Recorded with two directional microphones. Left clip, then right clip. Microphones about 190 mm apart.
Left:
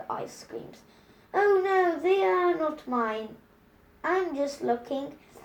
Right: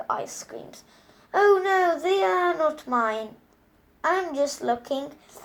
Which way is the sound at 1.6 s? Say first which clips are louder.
Right 3 dB; centre (ahead or behind).